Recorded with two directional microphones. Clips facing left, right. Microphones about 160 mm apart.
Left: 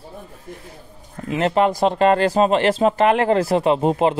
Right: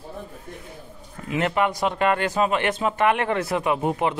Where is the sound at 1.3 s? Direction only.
30° left (ahead or behind).